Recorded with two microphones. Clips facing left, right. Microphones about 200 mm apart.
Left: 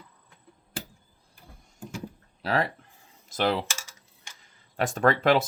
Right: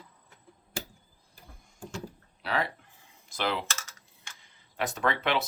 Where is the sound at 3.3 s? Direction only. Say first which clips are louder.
Left 5 dB; 40° left (ahead or behind).